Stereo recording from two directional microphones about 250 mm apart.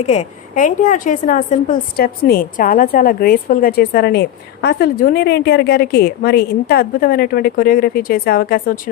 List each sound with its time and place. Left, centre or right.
0.0 s a woman's voice: left